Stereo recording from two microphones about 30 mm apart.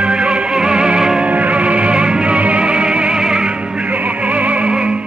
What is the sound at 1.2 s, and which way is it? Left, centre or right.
Music, right.